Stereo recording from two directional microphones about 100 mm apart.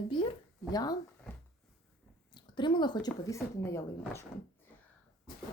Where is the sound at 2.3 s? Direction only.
50° left (ahead or behind).